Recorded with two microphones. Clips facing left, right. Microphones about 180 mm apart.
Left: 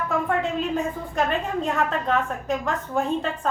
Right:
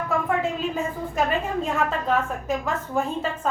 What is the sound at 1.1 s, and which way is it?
A woman's voice, centre (ahead or behind).